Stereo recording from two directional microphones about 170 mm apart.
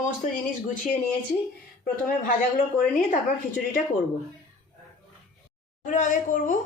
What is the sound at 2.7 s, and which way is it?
Speech, 50° left (ahead or behind).